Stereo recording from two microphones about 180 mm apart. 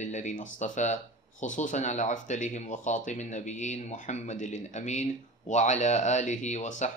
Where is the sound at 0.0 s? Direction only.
40° left (ahead or behind).